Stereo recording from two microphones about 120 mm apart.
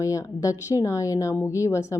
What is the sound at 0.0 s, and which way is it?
A woman's voice, 25° left (ahead or behind).